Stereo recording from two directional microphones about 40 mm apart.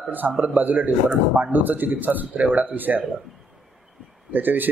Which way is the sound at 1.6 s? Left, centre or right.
Right.